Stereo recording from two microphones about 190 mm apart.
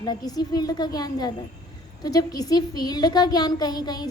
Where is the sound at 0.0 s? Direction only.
20° left (ahead or behind).